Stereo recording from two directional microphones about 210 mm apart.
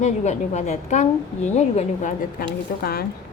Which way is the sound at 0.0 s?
35° left (ahead or behind).